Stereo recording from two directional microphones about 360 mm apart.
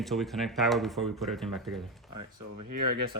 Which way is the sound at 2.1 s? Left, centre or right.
Right.